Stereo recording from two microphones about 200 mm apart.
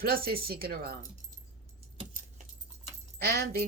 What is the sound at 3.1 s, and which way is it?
Speech, 50° right (ahead or behind).